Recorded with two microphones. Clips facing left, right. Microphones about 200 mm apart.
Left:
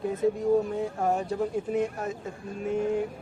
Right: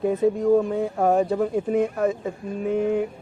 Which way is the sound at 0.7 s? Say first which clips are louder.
Right 6 dB; 90° right.